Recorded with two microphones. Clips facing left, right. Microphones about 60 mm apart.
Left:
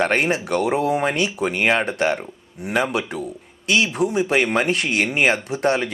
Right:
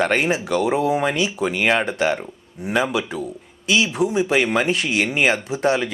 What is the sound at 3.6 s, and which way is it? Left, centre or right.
Speech, left.